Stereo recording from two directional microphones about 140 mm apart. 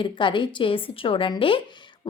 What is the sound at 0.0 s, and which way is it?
A woman's voice, 35° left (ahead or behind).